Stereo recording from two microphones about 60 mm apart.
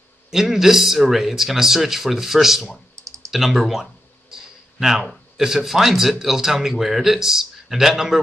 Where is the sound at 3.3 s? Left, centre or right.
Centre.